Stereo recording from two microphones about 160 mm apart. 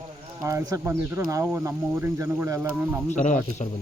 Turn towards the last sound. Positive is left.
turn(degrees=50)  # may be behind; listen again after turning